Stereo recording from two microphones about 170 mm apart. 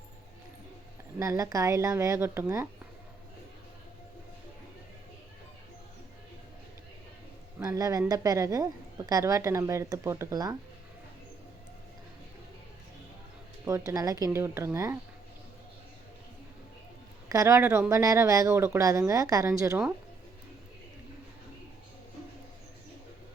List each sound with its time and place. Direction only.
1.2 s a woman's voice: 20° right (ahead or behind)
7.6 s a woman's voice: 20° right (ahead or behind)
13.7 s a woman's voice: 20° right (ahead or behind)
17.2 s a woman's voice: 20° right (ahead or behind)